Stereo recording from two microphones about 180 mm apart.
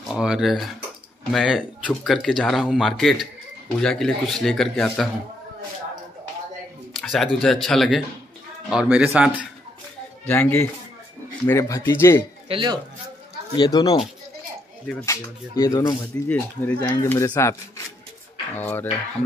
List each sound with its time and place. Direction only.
0.1 s speech: 5° right (ahead or behind)
6.9 s speech: centre (ahead or behind)
10.2 s speech: 10° left (ahead or behind)
12.4 s speech: 30° right (ahead or behind)
13.6 s speech: 25° left (ahead or behind)
16.0 s speech: 10° left (ahead or behind)